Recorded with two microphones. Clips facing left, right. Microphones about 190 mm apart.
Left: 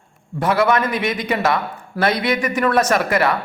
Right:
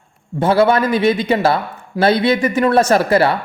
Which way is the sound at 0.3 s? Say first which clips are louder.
Right 4 dB; 30° right (ahead or behind).